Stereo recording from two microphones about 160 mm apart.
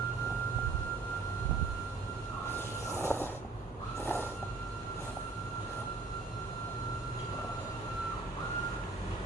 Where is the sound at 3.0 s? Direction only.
15° left (ahead or behind).